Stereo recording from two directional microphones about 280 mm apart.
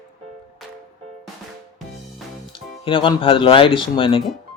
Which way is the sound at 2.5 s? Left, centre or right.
Centre.